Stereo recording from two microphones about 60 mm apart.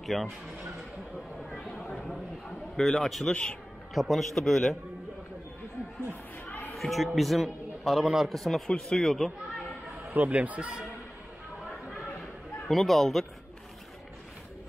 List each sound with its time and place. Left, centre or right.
0.0 s speech: centre
2.7 s a man's voice: centre
6.4 s a sound: left
6.7 s a man's voice: centre
10.1 s speech: right
12.6 s a man's voice: centre